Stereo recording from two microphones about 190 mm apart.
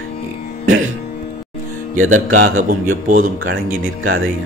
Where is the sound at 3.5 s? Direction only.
90° right.